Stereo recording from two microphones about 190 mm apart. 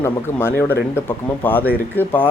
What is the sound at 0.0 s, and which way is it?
Speech, 10° left (ahead or behind).